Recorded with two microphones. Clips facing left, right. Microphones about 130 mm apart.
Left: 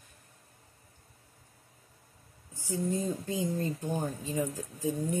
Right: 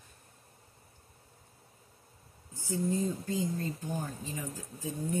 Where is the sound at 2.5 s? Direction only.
15° left (ahead or behind).